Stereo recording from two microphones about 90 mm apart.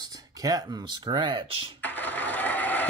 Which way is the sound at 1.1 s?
60° right (ahead or behind).